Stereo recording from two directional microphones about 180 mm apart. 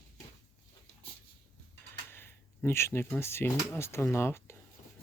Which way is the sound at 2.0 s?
10° left (ahead or behind).